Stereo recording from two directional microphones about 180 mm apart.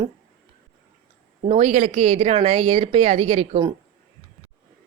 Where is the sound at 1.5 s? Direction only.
40° right (ahead or behind).